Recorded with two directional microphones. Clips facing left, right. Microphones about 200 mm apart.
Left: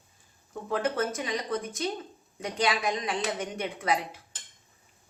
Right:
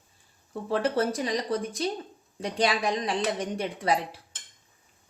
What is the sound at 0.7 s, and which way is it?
A woman's voice, 35° right (ahead or behind).